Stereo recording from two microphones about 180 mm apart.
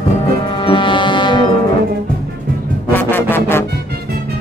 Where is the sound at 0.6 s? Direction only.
25° left (ahead or behind).